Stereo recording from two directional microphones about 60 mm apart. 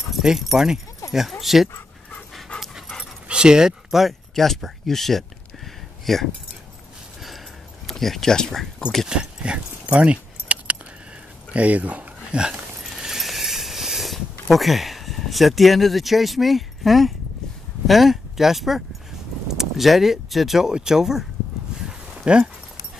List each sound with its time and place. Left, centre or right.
0.1 s speech: centre
1.0 s dog: left
1.4 s speech: centre
2.5 s dog: centre
3.3 s speech: centre
7.8 s speech: centre
9.0 s keys jangling: centre
11.5 s a sound: right; by 17.1 s centre
17.8 s speech: centre
21.8 s a sound: centre